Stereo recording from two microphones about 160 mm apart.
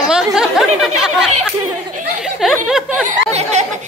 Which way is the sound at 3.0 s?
45° right (ahead or behind).